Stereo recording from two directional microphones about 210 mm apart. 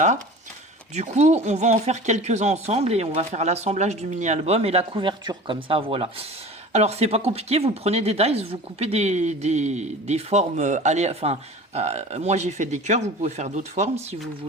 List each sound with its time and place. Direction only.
0.9 s speech: 35° right (ahead or behind)